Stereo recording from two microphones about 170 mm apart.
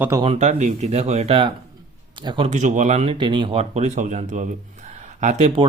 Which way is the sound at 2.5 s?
45° right (ahead or behind).